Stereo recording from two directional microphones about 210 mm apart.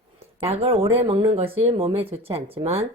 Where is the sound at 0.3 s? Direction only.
25° right (ahead or behind).